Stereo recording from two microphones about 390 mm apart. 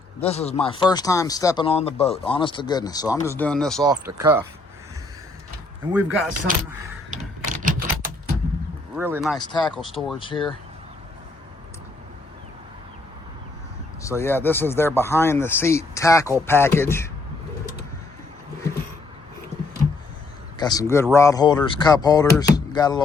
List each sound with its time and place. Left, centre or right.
0.2 s speech: centre
3.8 s beatboxing: centre
5.9 s beatboxing: centre
7.1 s typing: centre
9.0 s beatboxing: centre
9.4 s speech: centre
9.6 s beatboxing: centre
10.2 s speech: centre
14.0 s speech: centre
16.5 s beatboxing: centre
20.6 s speech: centre